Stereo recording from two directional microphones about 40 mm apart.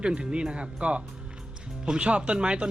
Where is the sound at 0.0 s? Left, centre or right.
Right.